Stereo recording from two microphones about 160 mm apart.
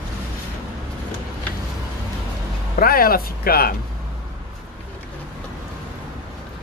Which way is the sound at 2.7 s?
65° left (ahead or behind).